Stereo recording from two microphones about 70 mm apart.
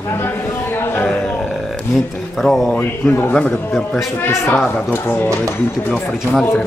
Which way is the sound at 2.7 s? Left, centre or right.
Left.